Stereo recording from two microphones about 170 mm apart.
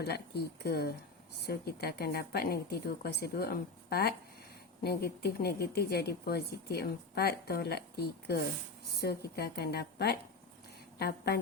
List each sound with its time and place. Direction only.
0.0 s a woman's voice: 70° left (ahead or behind)